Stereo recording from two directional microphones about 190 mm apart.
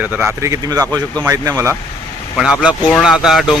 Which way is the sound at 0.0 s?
10° right (ahead or behind).